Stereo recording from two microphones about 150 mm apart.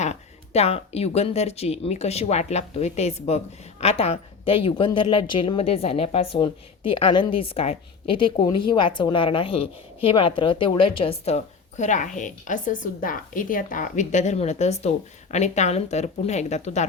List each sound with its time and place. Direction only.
0.0 s a woman's voice: 45° left (ahead or behind)